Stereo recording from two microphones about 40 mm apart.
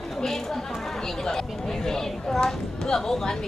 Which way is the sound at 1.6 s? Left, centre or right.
Centre.